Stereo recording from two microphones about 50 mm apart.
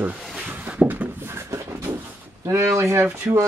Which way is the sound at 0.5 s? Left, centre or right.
Right.